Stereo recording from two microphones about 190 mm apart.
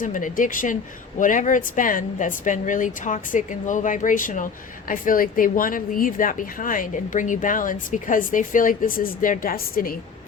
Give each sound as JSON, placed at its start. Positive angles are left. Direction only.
{"t": 0.0, "sound": "a woman's voice", "side_deg": 45}